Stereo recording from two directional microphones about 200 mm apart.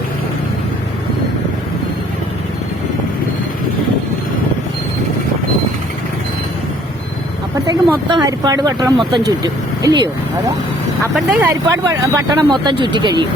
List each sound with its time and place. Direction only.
7.7 s speech: 20° right (ahead or behind)
11.1 s speech: centre (ahead or behind)
11.4 s speech: 15° right (ahead or behind)